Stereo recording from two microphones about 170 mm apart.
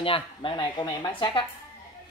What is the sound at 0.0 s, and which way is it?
Speech, 30° left (ahead or behind).